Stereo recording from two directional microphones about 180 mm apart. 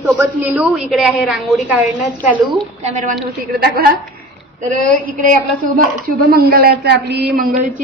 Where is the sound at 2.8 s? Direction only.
40° right (ahead or behind).